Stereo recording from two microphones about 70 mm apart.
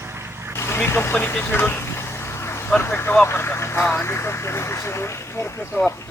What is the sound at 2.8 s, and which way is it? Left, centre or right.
Speech, left.